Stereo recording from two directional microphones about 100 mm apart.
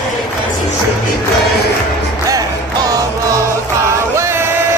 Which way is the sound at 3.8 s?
30° right (ahead or behind).